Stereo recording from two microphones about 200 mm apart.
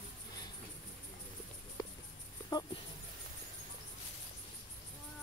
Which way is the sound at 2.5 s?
20° left (ahead or behind).